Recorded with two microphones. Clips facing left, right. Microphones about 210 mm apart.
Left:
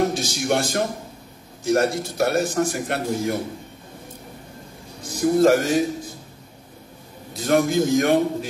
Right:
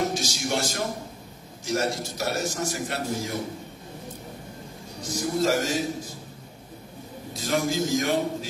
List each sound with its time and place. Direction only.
0.1 s a man's voice: 55° left (ahead or behind)
5.1 s a man's voice: 55° left (ahead or behind)
7.3 s a man's voice: 60° left (ahead or behind)